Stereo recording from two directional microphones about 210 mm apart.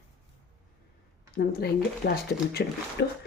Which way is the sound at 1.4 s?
50° left (ahead or behind).